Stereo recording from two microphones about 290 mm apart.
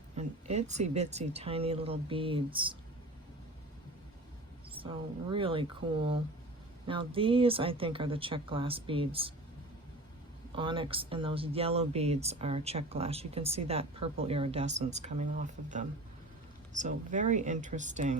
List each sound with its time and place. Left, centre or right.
0.2 s speech: right
4.7 s speech: centre
10.5 s speech: centre